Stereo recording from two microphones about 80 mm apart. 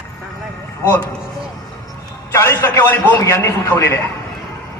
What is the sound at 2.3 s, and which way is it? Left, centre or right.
Speech, left.